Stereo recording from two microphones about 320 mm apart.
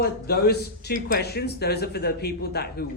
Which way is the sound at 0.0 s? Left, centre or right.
Left.